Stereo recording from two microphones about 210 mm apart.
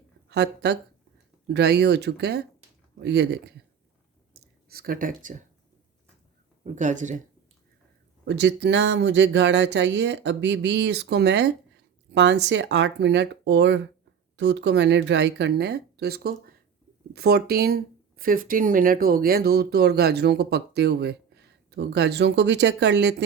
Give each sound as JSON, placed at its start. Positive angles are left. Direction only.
{"t": 0.3, "sound": "speech", "side_deg": -50}
{"t": 4.7, "sound": "speech", "side_deg": -45}
{"t": 6.7, "sound": "speech", "side_deg": -35}
{"t": 8.2, "sound": "speech", "side_deg": -55}